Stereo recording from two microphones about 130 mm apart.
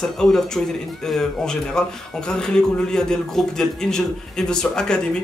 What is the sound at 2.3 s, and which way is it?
A man's voice, 5° left (ahead or behind).